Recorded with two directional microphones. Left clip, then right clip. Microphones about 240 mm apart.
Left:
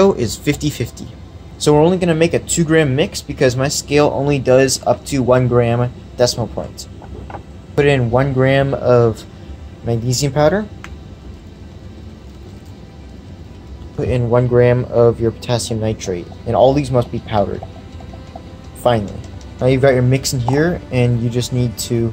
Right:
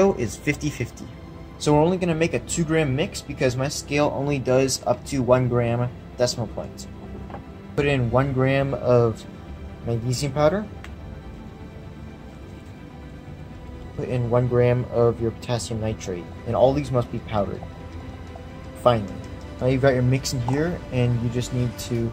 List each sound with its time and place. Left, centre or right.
0.2 s speech: left
1.6 s speech: centre
14.0 s speech: centre
18.8 s speech: centre